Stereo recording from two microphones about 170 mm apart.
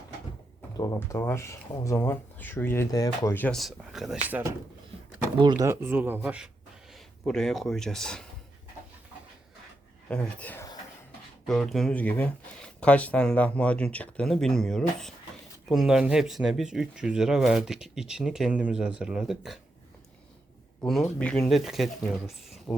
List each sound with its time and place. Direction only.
0.8 s speech: 20° left (ahead or behind)
3.3 s speech: 5° left (ahead or behind); by 4.5 s 10° right (ahead or behind)
5.4 s speech: 25° right (ahead or behind); by 8.3 s 5° left (ahead or behind)
10.1 s speech: 10° left (ahead or behind)
20.8 s speech: 5° left (ahead or behind)